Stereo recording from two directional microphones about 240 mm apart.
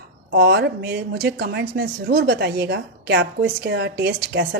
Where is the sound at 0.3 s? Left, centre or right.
Right.